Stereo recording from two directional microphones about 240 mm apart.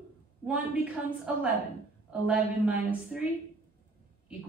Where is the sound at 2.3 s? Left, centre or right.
Centre.